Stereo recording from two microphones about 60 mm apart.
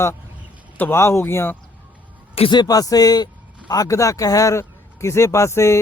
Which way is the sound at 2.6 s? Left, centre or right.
Left.